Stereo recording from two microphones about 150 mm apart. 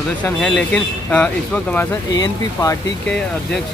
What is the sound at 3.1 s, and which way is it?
Speech, 5° left (ahead or behind).